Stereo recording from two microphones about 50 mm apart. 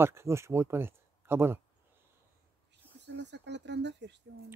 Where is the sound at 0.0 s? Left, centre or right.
Right.